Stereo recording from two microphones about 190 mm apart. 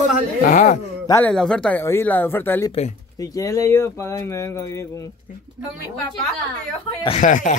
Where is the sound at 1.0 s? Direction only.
15° left (ahead or behind).